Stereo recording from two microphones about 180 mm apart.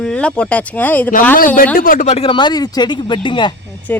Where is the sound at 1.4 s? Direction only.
50° left (ahead or behind); by 3.5 s 25° left (ahead or behind).